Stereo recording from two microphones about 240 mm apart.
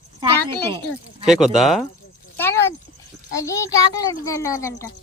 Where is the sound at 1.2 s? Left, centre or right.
Centre.